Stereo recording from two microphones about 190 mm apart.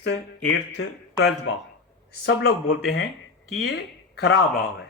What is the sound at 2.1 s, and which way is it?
Speech, 60° left (ahead or behind).